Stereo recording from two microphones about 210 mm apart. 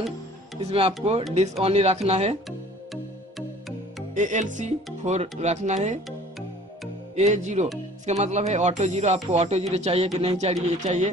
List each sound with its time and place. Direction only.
0.7 s speech: 30° right (ahead or behind)
4.1 s speech: 35° right (ahead or behind)
7.2 s speech: 35° right (ahead or behind)